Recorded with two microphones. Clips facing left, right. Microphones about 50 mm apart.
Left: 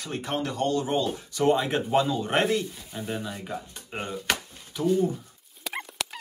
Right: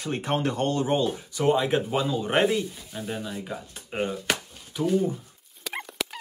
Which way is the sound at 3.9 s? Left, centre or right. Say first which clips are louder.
Right 2 dB; centre.